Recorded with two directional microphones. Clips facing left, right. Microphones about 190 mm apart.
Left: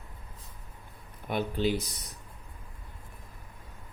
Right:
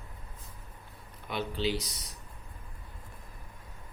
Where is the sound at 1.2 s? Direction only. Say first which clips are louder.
Left 3 dB; 50° left (ahead or behind).